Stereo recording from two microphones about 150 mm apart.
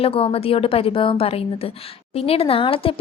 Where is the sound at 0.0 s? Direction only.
40° left (ahead or behind).